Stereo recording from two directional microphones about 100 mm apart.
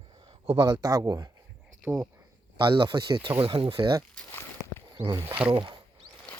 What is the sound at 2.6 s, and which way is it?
Speech, 50° right (ahead or behind).